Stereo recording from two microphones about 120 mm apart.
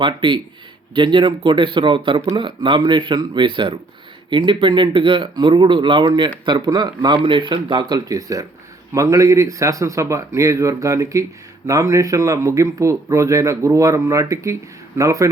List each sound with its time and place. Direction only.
0.0 s a man's voice: 45° right (ahead or behind); by 15.3 s 25° right (ahead or behind)